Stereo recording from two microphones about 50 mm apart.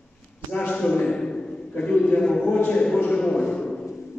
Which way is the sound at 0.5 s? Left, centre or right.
Left.